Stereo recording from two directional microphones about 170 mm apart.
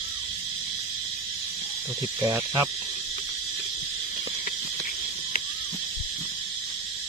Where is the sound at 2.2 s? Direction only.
20° right (ahead or behind).